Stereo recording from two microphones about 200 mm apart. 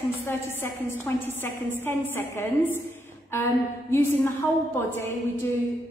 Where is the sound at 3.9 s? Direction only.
10° left (ahead or behind).